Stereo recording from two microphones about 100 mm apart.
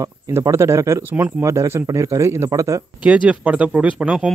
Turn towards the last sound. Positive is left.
turn(degrees=-10)  # may be behind; listen again after turning